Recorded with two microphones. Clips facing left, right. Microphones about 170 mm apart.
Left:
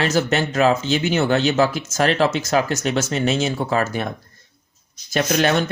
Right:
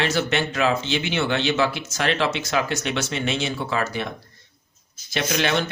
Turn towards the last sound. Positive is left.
turn(degrees=45)  # may be behind; listen again after turning